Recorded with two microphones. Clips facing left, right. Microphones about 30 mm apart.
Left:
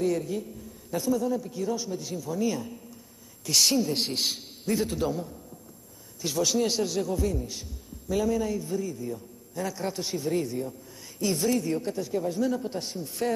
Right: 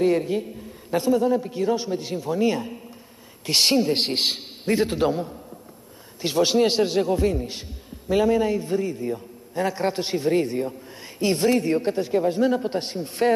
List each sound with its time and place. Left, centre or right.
0.0 s a man's voice: right